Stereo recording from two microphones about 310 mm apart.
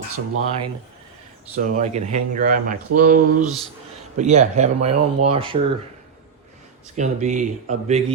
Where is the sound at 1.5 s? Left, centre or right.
Right.